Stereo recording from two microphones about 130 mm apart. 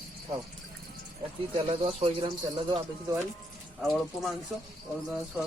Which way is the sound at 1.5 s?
45° right (ahead or behind).